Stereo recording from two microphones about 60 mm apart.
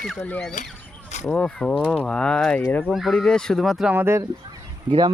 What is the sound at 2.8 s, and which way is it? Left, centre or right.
Speech, centre.